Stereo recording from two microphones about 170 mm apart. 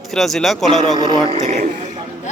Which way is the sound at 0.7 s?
45° left (ahead or behind).